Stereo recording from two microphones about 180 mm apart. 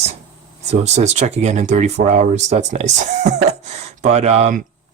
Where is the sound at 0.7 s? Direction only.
40° right (ahead or behind).